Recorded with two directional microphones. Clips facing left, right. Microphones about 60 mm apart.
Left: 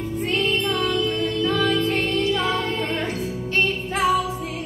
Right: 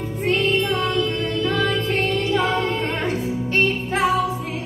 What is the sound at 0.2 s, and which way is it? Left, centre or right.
Music, right.